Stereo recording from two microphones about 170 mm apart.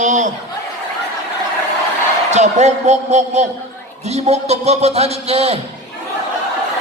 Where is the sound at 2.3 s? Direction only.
45° right (ahead or behind).